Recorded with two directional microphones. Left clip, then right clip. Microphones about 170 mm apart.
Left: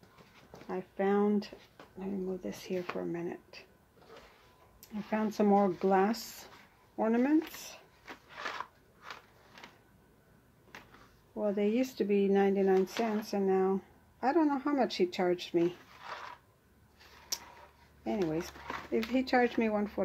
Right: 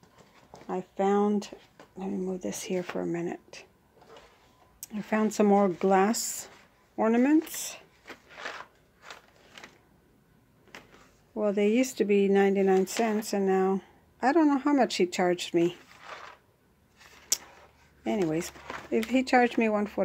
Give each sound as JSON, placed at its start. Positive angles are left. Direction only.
{"t": 0.7, "sound": "speech", "side_deg": -50}
{"t": 4.7, "sound": "speech", "side_deg": -50}
{"t": 11.3, "sound": "speech", "side_deg": -40}
{"t": 17.3, "sound": "tick", "side_deg": -45}
{"t": 18.0, "sound": "speech", "side_deg": -45}